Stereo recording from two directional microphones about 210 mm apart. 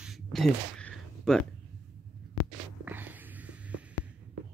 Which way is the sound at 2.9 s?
10° right (ahead or behind).